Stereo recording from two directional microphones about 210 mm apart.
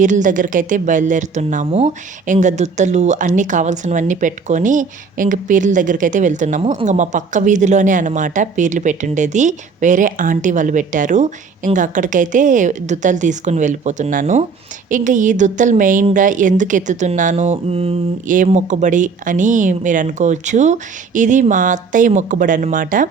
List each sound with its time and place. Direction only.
0.0 s speech: 35° right (ahead or behind)